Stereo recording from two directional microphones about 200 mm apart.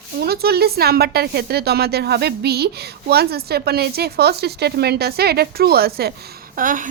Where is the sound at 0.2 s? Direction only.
50° right (ahead or behind).